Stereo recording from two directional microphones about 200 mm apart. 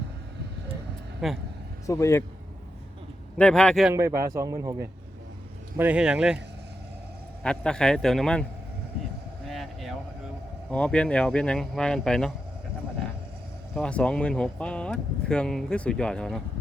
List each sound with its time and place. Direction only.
1.2 s speech: centre (ahead or behind)
1.9 s a man's voice: 15° left (ahead or behind)
3.3 s speech: 5° left (ahead or behind)
4.2 s speech: 15° right (ahead or behind)
7.4 s speech: 5° left (ahead or behind)
9.5 s a sound: centre (ahead or behind)
10.7 s speech: 5° left (ahead or behind)
13.7 s speech: 5° left (ahead or behind)